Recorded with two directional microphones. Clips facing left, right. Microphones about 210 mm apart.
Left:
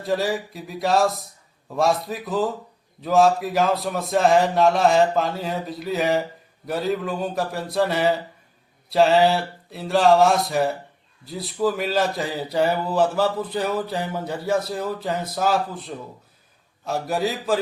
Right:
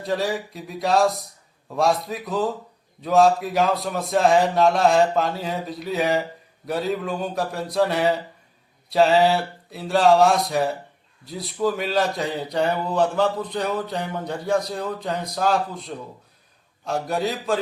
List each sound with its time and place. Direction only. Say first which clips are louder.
0.0 s speech: left 1 dB; centre (ahead or behind)